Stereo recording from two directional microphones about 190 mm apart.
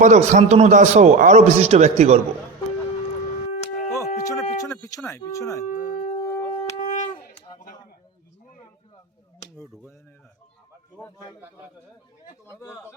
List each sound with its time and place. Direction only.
0.0 s a man's voice: 40° right (ahead or behind)
3.9 s a sound: 20° left (ahead or behind)
5.0 s speech: 15° left (ahead or behind)
5.6 s howl: 45° left (ahead or behind)
6.1 s shofar: 20° left (ahead or behind)
6.7 s wind instrument: 40° left (ahead or behind)
12.5 s speech: 15° left (ahead or behind)